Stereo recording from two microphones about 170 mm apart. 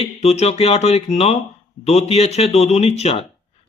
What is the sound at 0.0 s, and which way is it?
Speech, 40° left (ahead or behind).